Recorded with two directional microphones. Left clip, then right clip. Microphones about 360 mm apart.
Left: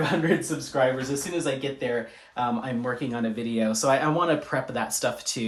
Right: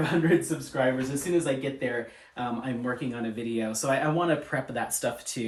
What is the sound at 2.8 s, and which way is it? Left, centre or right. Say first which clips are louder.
Speech: left 3 dB; centre.